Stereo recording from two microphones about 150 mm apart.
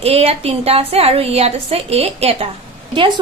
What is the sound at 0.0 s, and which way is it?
A woman's voice, 40° right (ahead or behind).